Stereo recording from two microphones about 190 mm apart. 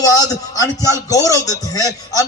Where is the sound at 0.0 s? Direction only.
20° left (ahead or behind).